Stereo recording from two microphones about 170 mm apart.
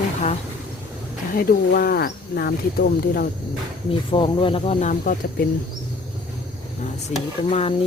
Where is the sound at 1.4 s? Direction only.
65° left (ahead or behind).